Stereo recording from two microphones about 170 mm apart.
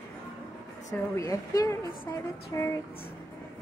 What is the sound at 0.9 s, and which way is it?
A woman's voice, 20° left (ahead or behind).